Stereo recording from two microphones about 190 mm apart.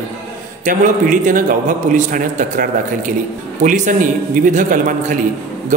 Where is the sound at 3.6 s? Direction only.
40° right (ahead or behind).